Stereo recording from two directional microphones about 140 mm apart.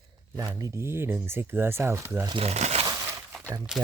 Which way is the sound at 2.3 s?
45° right (ahead or behind).